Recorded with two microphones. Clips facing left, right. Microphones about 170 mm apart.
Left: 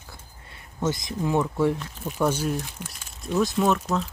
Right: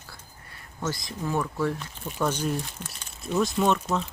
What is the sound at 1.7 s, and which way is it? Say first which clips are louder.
Speech: left 3 dB; 10° left (ahead or behind).